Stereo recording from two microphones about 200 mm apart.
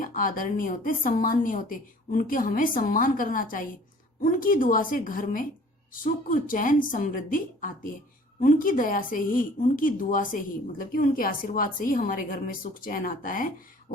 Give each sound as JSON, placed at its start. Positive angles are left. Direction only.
{"t": 0.0, "sound": "speech", "side_deg": 45}